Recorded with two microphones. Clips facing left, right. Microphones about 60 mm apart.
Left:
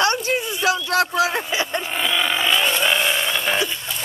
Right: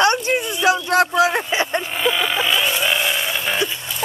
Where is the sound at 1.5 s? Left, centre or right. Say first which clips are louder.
Right 3 dB; right.